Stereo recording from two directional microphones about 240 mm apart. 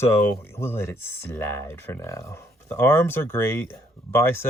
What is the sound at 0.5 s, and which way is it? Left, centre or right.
Speech, centre.